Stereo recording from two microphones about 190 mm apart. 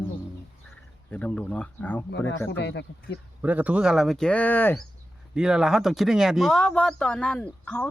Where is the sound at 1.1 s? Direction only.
5° left (ahead or behind).